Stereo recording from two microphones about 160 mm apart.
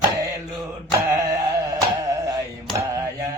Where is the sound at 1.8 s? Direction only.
20° right (ahead or behind).